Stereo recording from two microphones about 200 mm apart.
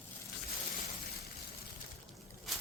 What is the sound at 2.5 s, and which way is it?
Boat, centre (ahead or behind).